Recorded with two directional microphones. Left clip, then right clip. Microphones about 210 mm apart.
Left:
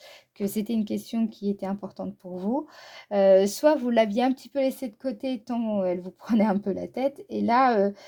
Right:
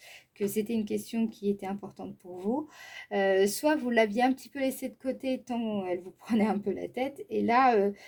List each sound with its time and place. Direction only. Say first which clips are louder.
0.3 s a woman's voice: left 1 dB; 45° left (ahead or behind)